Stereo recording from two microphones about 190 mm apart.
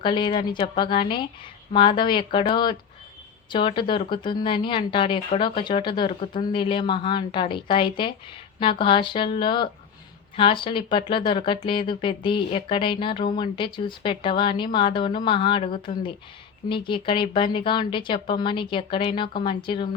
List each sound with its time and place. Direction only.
0.0 s speech: 25° left (ahead or behind)